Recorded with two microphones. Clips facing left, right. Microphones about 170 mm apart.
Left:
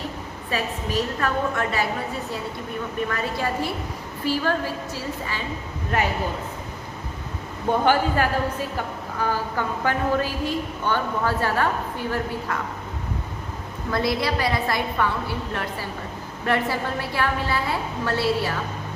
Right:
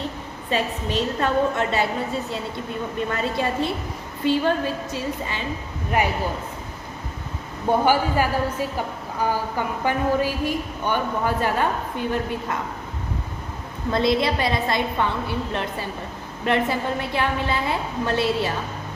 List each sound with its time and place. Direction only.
0.5 s a woman's voice: 25° right (ahead or behind)
3.1 s a woman's voice: 25° right (ahead or behind)
7.9 s a woman's voice: 10° right (ahead or behind)
13.9 s a woman's voice: 20° right (ahead or behind)